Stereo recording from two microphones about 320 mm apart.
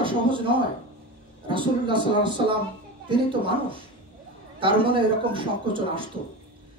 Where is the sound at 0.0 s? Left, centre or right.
Centre.